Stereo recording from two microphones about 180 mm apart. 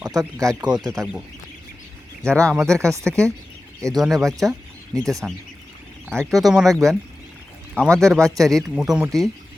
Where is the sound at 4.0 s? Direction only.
Centre (ahead or behind).